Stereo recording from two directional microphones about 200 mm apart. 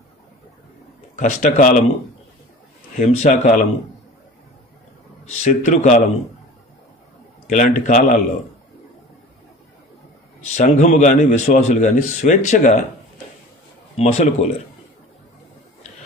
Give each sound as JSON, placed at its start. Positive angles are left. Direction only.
{"t": 1.1, "sound": "a man's voice", "side_deg": 40}
{"t": 3.0, "sound": "speech", "side_deg": 40}
{"t": 5.4, "sound": "a man's voice", "side_deg": 35}
{"t": 7.4, "sound": "a man's voice", "side_deg": 40}
{"t": 10.4, "sound": "a man's voice", "side_deg": 35}
{"t": 13.9, "sound": "a man's voice", "side_deg": 30}